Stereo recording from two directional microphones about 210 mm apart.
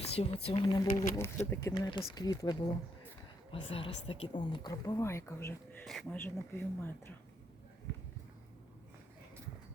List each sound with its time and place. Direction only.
0.0 s a sound: 30° left (ahead or behind)
0.4 s speech: 25° left (ahead or behind)
0.9 s a woman's voice: 15° left (ahead or behind)
3.7 s a woman's voice: 25° left (ahead or behind)